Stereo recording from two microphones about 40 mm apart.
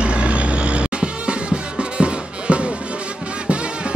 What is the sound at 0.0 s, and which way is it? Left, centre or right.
Music, right.